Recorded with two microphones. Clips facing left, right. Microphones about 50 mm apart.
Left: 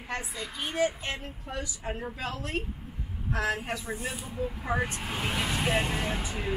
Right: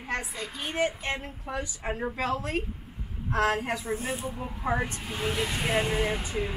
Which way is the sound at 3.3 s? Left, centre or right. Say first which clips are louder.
Right 4 dB; right.